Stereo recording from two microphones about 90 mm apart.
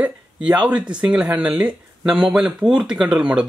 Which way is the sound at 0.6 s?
10° right (ahead or behind).